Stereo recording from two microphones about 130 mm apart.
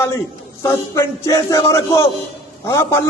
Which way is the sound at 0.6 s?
25° left (ahead or behind).